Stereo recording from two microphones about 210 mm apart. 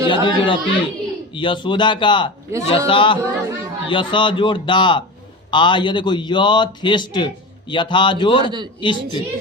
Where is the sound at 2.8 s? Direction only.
25° left (ahead or behind).